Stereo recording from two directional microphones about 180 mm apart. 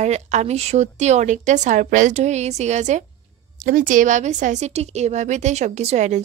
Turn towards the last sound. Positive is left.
turn(degrees=-40)  # may be behind; listen again after turning